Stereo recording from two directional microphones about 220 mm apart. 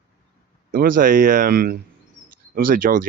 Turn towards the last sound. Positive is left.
turn(degrees=-40)  # may be behind; listen again after turning